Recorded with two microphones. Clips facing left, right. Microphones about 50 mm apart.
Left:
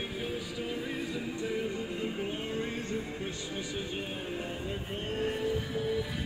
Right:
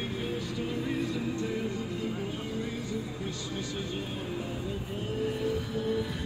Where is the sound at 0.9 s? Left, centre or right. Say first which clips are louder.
Right 4 dB; centre.